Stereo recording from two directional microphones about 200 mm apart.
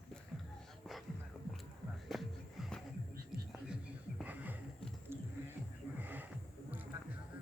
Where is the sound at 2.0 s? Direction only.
Centre (ahead or behind).